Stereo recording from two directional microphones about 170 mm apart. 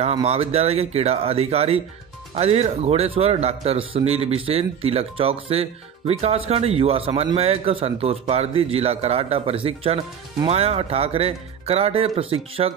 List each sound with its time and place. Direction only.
0.0 s speech: 35° right (ahead or behind)